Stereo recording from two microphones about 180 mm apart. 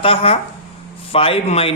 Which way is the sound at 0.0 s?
30° left (ahead or behind).